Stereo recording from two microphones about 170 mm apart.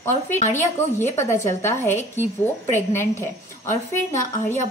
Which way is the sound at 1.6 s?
15° left (ahead or behind).